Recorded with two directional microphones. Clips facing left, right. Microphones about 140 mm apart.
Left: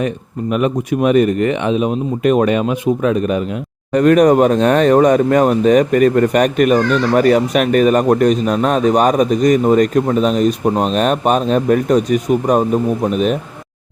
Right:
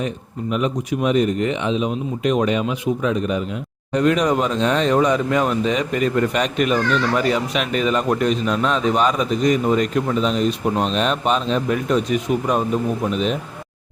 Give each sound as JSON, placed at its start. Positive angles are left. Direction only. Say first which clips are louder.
{"t": 0.5, "sound": "speech", "louder": "left 5 dB", "side_deg": 55}